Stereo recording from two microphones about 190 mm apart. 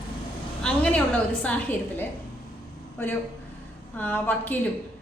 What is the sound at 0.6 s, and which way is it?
A woman's voice, 5° left (ahead or behind).